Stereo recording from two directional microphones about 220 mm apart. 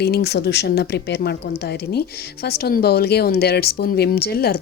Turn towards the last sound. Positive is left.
turn(degrees=45)  # may be behind; listen again after turning